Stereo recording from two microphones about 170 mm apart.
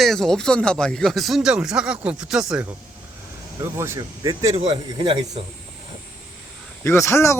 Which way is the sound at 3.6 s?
15° right (ahead or behind).